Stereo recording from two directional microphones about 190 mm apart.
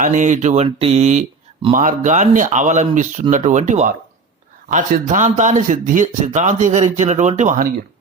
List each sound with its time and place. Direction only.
0.0 s speech: 40° right (ahead or behind)